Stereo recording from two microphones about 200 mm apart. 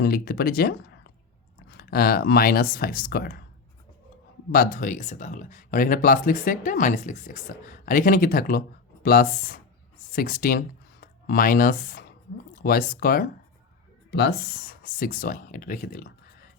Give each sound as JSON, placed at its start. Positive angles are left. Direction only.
{"t": 0.0, "sound": "speech", "side_deg": 50}
{"t": 1.7, "sound": "speech", "side_deg": 50}
{"t": 4.5, "sound": "speech", "side_deg": 45}
{"t": 14.1, "sound": "speech", "side_deg": 55}